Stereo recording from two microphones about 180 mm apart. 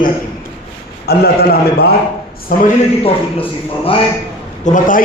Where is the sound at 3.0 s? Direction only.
30° left (ahead or behind).